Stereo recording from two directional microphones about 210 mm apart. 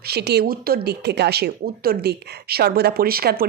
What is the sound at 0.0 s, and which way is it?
Speech, 50° right (ahead or behind).